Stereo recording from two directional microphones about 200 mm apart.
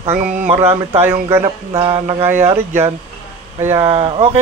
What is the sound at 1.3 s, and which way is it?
Mantra, 15° right (ahead or behind).